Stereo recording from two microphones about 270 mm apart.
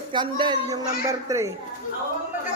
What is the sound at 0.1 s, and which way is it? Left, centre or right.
Speech, centre.